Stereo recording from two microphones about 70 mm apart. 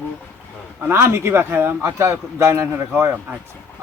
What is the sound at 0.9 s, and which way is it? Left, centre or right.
A man's voice, right.